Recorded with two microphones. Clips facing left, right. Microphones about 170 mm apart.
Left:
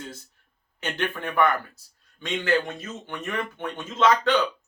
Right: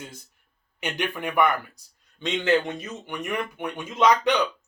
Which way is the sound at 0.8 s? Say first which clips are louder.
Even; 15° right (ahead or behind).